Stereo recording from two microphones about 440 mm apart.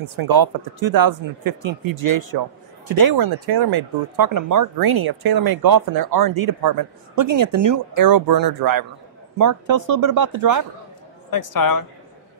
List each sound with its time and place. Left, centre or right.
0.2 s speech: right
11.2 s speech: left